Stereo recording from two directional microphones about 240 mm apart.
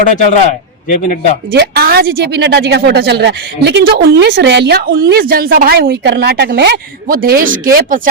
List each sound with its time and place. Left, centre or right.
0.0 s a man's voice: left
1.5 s a woman's voice: right